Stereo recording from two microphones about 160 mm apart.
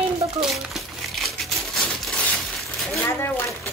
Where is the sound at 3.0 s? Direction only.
15° left (ahead or behind).